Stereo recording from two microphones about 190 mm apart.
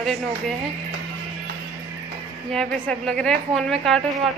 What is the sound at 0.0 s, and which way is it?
Speech, centre (ahead or behind).